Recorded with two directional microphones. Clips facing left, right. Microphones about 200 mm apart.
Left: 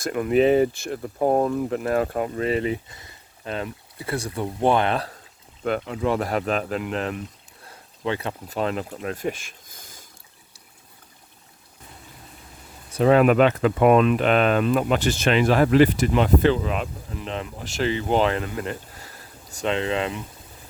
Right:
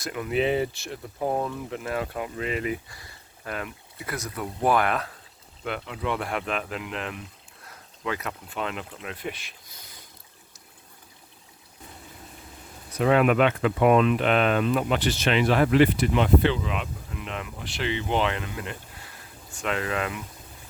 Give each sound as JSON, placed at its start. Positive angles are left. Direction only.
{"t": 0.0, "sound": "speech", "side_deg": 45}
{"t": 5.6, "sound": "speech", "side_deg": 40}
{"t": 12.9, "sound": "speech", "side_deg": 35}
{"t": 19.6, "sound": "speech", "side_deg": 25}